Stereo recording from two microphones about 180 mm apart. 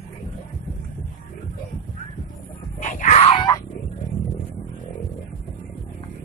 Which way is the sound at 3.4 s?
20° left (ahead or behind).